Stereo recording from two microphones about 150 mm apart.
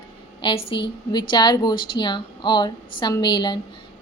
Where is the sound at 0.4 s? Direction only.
35° left (ahead or behind).